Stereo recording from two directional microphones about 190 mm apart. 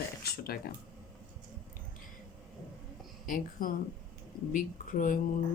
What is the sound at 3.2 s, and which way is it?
Speech, 45° left (ahead or behind).